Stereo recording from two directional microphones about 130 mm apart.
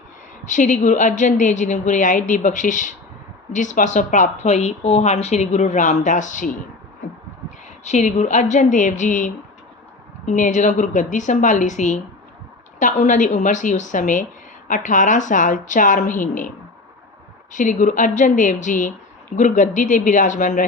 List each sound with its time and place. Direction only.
0.4 s a woman's voice: 75° left (ahead or behind)
7.9 s a woman's voice: 60° left (ahead or behind); by 16.5 s 85° left
17.5 s a woman's voice: 80° left